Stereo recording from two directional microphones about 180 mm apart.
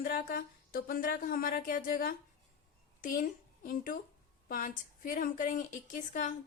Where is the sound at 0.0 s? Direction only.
55° left (ahead or behind).